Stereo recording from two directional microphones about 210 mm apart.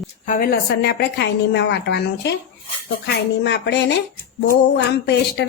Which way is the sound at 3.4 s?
55° left (ahead or behind).